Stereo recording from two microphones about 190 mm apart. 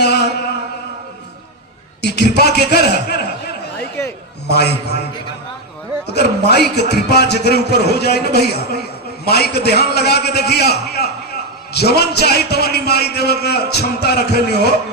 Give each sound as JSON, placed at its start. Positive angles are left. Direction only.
{"t": 0.0, "sound": "a sound", "side_deg": 60}
{"t": 2.0, "sound": "a man's voice", "side_deg": 60}
{"t": 3.8, "sound": "chatter", "side_deg": 10}
{"t": 4.4, "sound": "a man's voice", "side_deg": 60}
{"t": 6.1, "sound": "a man's voice", "side_deg": 60}